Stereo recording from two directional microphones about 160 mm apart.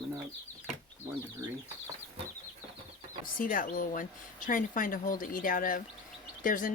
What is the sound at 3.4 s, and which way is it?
Speech, 60° left (ahead or behind).